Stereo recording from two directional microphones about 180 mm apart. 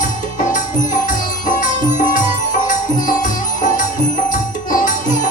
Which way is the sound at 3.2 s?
45° left (ahead or behind).